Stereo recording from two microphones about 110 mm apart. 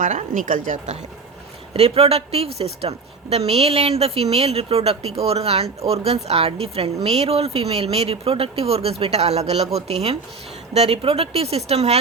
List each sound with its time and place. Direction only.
1.7 s speech: 65° right (ahead or behind)
10.8 s speech: 60° right (ahead or behind); by 11.9 s 75° right (ahead or behind)